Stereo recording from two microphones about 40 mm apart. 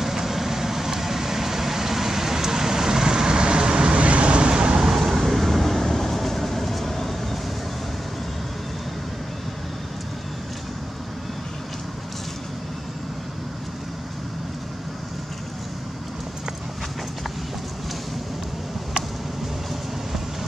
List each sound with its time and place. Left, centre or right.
0.0 s vehicle: centre
4.8 s train: centre